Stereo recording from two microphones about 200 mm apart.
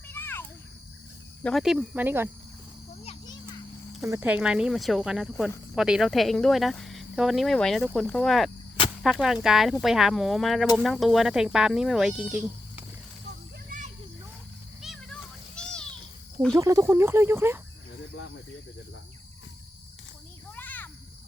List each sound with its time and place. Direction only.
0.1 s a sound: 10° left (ahead or behind)
1.5 s speech: centre (ahead or behind)
3.0 s children playing: 30° left (ahead or behind)
4.0 s speech: 10° right (ahead or behind)
13.7 s children playing: 40° right (ahead or behind)
14.8 s children playing: centre (ahead or behind)
16.6 s speech: 15° right (ahead or behind)
20.6 s a sound: 10° left (ahead or behind)